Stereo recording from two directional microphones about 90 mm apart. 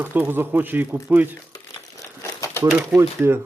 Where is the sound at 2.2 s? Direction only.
30° left (ahead or behind).